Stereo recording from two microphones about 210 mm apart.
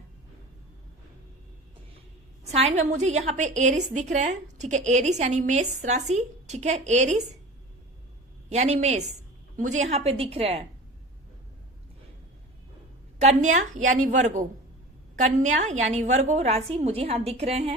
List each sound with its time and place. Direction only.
2.5 s a woman's voice: 30° right (ahead or behind)
8.4 s a woman's voice: 30° right (ahead or behind)
13.2 s a woman's voice: 35° right (ahead or behind)